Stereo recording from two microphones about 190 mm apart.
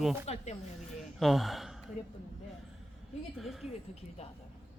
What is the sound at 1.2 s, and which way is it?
Speech, centre (ahead or behind).